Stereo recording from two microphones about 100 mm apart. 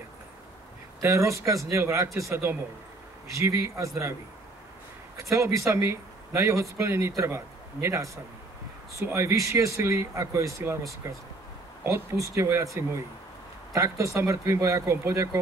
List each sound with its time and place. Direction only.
1.0 s speech: 30° right (ahead or behind)
5.1 s speech: 30° right (ahead or behind)
13.7 s speech: 30° right (ahead or behind)